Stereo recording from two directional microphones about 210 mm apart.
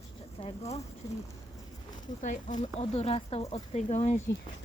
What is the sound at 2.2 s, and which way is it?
Speech, 35° left (ahead or behind).